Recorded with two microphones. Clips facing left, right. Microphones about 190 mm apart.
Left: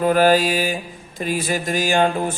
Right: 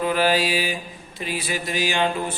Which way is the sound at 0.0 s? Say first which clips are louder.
Left 5 dB; 45° left (ahead or behind).